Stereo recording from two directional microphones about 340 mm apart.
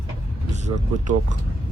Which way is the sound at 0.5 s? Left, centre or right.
Centre.